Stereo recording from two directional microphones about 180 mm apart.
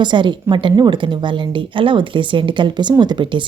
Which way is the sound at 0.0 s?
25° right (ahead or behind).